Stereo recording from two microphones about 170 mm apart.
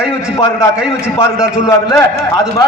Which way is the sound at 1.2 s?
15° left (ahead or behind).